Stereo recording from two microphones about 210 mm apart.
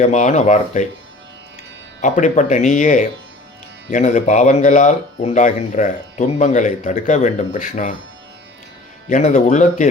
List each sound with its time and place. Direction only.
0.0 s speech: 35° left (ahead or behind)
2.0 s speech: 35° left (ahead or behind)
9.0 s speech: 35° left (ahead or behind)